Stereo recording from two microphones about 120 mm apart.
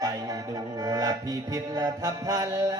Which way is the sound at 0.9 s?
30° right (ahead or behind).